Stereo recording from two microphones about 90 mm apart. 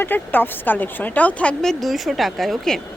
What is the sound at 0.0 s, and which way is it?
Speech, 20° left (ahead or behind).